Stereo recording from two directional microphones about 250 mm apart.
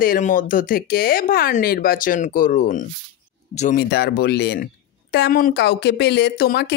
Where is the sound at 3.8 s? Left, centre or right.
Left.